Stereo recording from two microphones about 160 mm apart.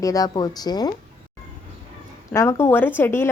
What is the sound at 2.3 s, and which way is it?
Speech, 15° left (ahead or behind).